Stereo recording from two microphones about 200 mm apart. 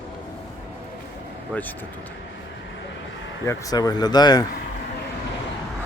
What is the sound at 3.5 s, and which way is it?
Speech, 15° left (ahead or behind).